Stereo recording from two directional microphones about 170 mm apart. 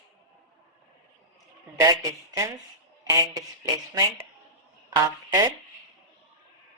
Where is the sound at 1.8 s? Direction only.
20° right (ahead or behind).